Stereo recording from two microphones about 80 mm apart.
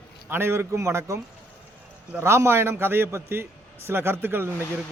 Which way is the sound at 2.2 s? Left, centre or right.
Right.